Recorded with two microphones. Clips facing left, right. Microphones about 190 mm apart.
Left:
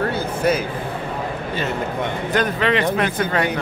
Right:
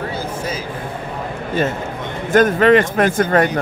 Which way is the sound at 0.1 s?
60° left (ahead or behind).